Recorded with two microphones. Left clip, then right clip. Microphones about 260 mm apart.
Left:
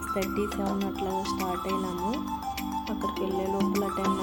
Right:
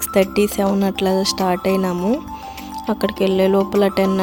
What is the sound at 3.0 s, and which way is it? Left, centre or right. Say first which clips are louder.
Speech: right 15 dB; right.